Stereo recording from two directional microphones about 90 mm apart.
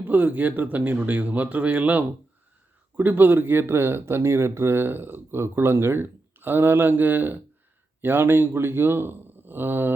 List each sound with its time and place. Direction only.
0.0 s speech: 20° right (ahead or behind)